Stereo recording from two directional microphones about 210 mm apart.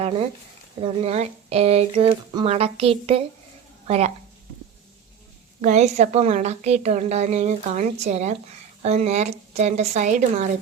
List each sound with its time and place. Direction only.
0.0 s speech: 30° right (ahead or behind)
5.6 s a woman's voice: 30° right (ahead or behind)